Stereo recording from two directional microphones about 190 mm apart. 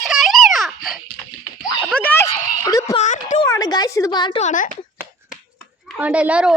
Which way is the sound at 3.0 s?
40° left (ahead or behind).